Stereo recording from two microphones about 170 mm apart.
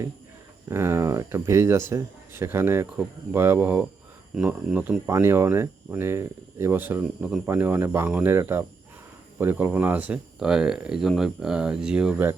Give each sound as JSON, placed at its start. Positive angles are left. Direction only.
{"t": 0.7, "sound": "speech", "side_deg": -15}